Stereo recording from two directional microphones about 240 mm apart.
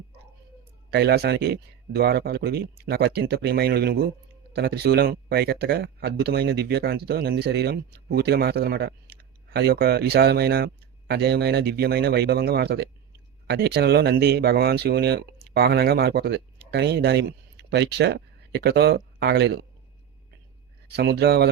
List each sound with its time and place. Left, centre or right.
0.9 s speech: right
20.8 s speech: right